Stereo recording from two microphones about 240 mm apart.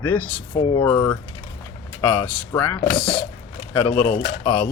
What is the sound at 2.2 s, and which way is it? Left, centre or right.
Speech, centre.